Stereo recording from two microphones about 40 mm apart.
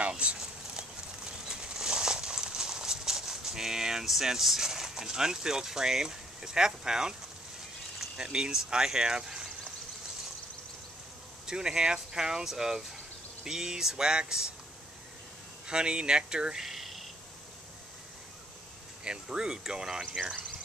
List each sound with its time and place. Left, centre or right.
0.2 s a sound: right
8.2 s speech: centre
11.4 s speech: centre
15.6 s speech: right
16.5 s a sound: centre
19.0 s speech: centre